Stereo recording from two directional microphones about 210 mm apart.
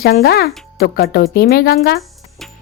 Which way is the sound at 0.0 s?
50° left (ahead or behind).